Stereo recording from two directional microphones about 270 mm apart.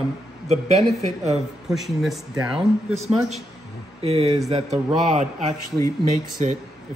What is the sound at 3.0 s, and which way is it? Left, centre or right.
Speech, right.